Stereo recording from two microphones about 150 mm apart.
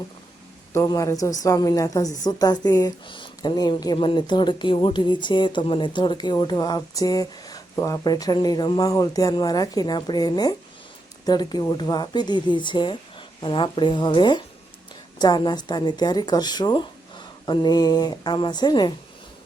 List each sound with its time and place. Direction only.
0.7 s a woman's voice: 20° left (ahead or behind)